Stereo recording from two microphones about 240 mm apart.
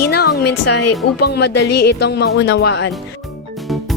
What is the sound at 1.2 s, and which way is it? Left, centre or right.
Speech, left.